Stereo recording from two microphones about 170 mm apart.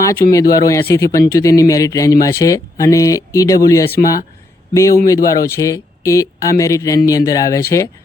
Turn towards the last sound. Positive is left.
turn(degrees=20)  # may be behind; listen again after turning